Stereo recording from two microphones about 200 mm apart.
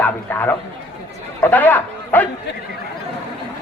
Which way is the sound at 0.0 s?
10° left (ahead or behind).